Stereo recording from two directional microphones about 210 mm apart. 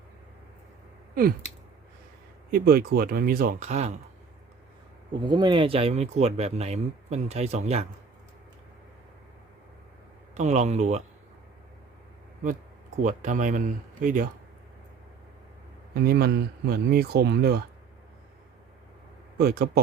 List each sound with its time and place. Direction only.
1.1 s a sound: 45° right (ahead or behind)
2.5 s speech: 45° right (ahead or behind)
5.2 s speech: 20° right (ahead or behind)
10.3 s speech: 30° right (ahead or behind)
13.0 s speech: 40° right (ahead or behind)
16.0 s speech: 50° right (ahead or behind)
19.4 s speech: 50° right (ahead or behind)